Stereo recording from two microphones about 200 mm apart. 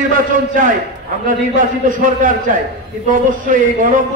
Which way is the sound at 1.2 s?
40° right (ahead or behind).